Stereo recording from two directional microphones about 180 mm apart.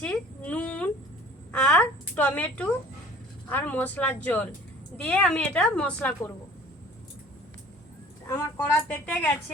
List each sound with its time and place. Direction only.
0.0 s speech: 5° left (ahead or behind)
8.3 s speech: 15° left (ahead or behind)